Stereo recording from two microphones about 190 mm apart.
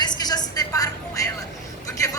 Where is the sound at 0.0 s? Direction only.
20° left (ahead or behind).